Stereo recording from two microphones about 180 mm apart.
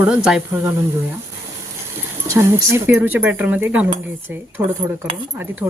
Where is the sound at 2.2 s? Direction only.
15° right (ahead or behind).